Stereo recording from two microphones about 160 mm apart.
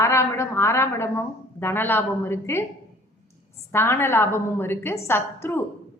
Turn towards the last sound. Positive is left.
turn(degrees=15)  # may be behind; listen again after turning